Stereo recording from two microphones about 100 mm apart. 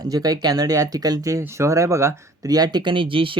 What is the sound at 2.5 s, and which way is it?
Speech, 45° right (ahead or behind).